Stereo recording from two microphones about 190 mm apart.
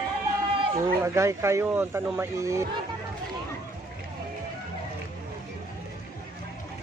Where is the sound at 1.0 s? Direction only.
15° right (ahead or behind).